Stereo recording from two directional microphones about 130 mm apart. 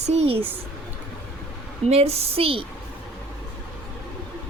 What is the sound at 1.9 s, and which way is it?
Speech, 50° right (ahead or behind).